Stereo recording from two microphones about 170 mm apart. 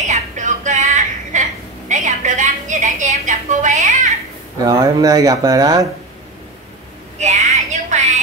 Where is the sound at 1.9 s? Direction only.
45° right (ahead or behind).